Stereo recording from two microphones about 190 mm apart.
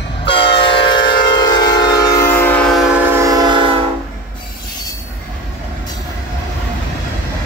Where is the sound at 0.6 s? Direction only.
25° left (ahead or behind); by 3.8 s 25° right (ahead or behind).